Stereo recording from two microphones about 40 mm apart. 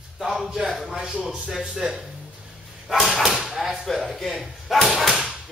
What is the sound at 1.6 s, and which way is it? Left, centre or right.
Speech, right.